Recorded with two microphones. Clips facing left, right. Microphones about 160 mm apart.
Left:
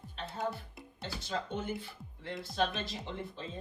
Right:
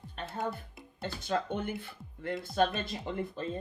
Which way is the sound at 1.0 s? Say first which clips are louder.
Right 5 dB; 50° right (ahead or behind).